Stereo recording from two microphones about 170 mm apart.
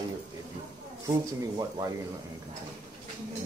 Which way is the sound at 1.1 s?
20° right (ahead or behind).